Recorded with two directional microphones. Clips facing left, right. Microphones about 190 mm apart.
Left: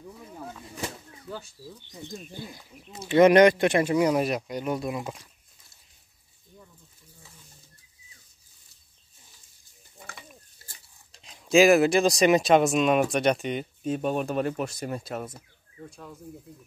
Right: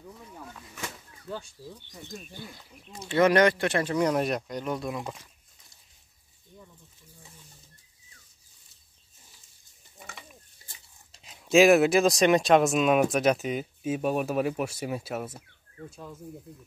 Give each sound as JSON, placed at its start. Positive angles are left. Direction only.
{"t": 1.9, "sound": "speech", "side_deg": 15}
{"t": 3.2, "sound": "speech", "side_deg": 20}
{"t": 9.9, "sound": "speech", "side_deg": 0}